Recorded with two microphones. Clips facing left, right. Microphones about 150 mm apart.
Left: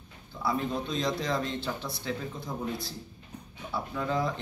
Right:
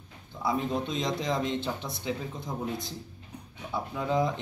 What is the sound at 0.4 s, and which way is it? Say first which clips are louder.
Speech: right 1 dB; 20° right (ahead or behind).